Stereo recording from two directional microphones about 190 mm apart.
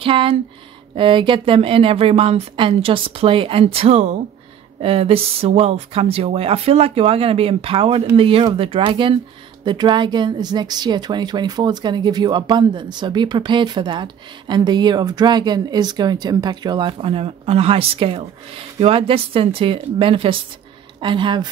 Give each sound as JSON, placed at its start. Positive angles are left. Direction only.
{"t": 0.0, "sound": "speech", "side_deg": -30}